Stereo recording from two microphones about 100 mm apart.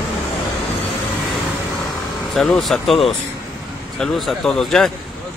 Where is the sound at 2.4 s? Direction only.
5° left (ahead or behind).